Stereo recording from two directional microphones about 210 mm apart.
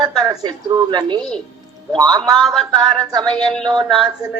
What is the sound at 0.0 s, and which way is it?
A woman's voice, 20° right (ahead or behind).